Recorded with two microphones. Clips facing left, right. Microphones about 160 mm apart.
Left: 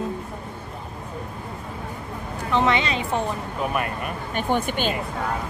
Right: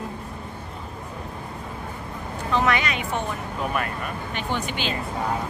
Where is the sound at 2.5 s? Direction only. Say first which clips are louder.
Left 2 dB; 25° left (ahead or behind).